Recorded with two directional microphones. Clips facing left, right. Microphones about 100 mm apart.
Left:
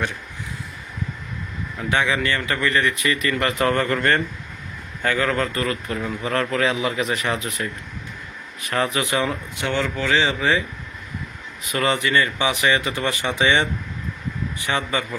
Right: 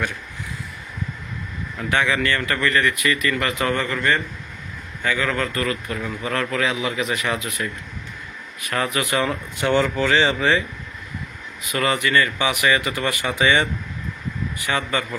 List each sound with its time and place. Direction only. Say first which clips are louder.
1.8 s speech: even; 15° left (ahead or behind)
3.0 s a man's voice: even; 30° left (ahead or behind)
3.8 s a man's voice: left 2 dB; 50° left (ahead or behind); by 7.7 s 35° left (ahead or behind)
8.7 s speech: left 1 dB; 25° left (ahead or behind)
9.3 s speech: right 4 dB; centre (ahead or behind)
11.6 s a man's voice: even; 30° left (ahead or behind)
12.0 s speech: even; 20° left (ahead or behind)
14.7 s speech: even; 20° left (ahead or behind)